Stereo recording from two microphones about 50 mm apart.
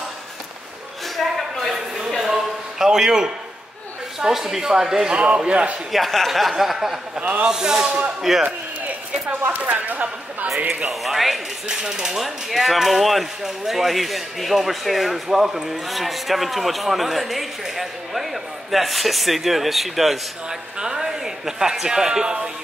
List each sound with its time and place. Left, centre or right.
1.1 s a sound: centre
4.3 s speech: centre
5.1 s a man's voice: right
5.9 s speech: centre
7.2 s a man's voice: right
7.4 s speech: centre
9.5 s speech: right
10.9 s speech: centre
20.4 s a man's voice: centre